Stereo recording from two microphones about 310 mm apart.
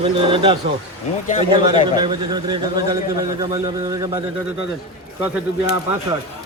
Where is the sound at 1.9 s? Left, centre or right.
Centre.